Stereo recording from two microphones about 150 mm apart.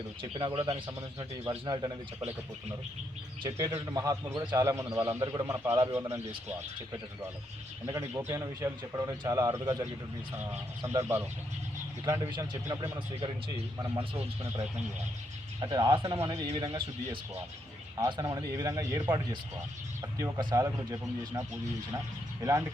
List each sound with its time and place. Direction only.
0.2 s speech: 35° right (ahead or behind)
3.4 s speech: 20° right (ahead or behind)
7.9 s speech: 20° right (ahead or behind)
15.6 s speech: 25° right (ahead or behind)
16.5 s speech: 40° right (ahead or behind)
17.9 s speech: 20° right (ahead or behind)